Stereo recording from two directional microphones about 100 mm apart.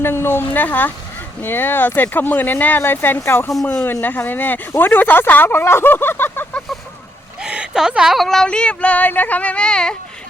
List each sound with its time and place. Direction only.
0.0 s speech: 25° left (ahead or behind)
7.4 s speech: 10° right (ahead or behind); by 9.9 s 10° left (ahead or behind)